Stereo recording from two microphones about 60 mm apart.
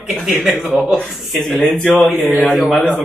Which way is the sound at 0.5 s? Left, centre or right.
Centre.